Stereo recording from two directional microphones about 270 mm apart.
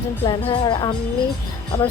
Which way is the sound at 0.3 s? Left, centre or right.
Centre.